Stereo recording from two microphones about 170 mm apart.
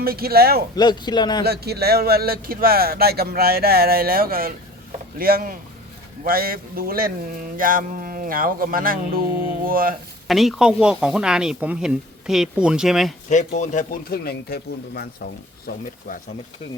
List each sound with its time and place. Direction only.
0.0 s speech: 60° right (ahead or behind)
0.8 s speech: 25° left (ahead or behind)
1.5 s speech: 70° right (ahead or behind)
10.2 s speech: centre (ahead or behind)
13.3 s speech: 45° left (ahead or behind)
14.1 s speech: 65° left (ahead or behind)